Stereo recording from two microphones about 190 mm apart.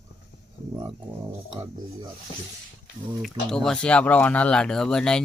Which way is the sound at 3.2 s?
5° left (ahead or behind).